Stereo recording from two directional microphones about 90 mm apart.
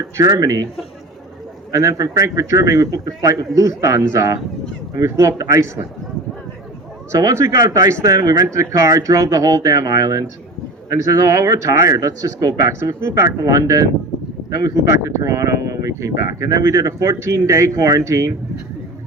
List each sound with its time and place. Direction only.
0.0 s speech: 40° right (ahead or behind)
1.7 s speech: 35° right (ahead or behind)
7.1 s speech: 35° right (ahead or behind)